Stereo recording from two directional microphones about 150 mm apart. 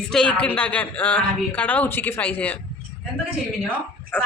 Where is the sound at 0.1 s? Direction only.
5° left (ahead or behind).